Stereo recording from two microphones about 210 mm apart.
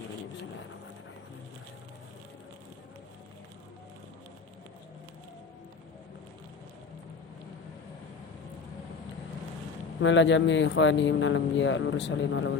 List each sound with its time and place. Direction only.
10.0 s speech: 60° left (ahead or behind)